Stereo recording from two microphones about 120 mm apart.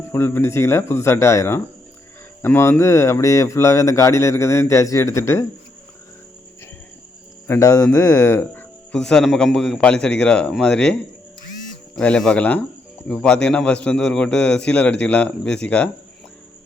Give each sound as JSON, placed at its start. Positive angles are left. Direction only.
{"t": 0.1, "sound": "speech", "side_deg": 20}
{"t": 7.4, "sound": "speech", "side_deg": 20}
{"t": 8.9, "sound": "a man's voice", "side_deg": 5}
{"t": 11.9, "sound": "a man's voice", "side_deg": 10}